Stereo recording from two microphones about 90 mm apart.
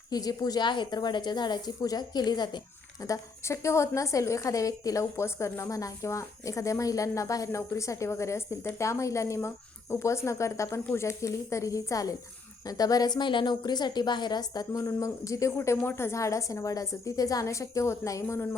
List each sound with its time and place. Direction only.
0.1 s speech: 45° left (ahead or behind)
3.0 s a woman's voice: 35° left (ahead or behind)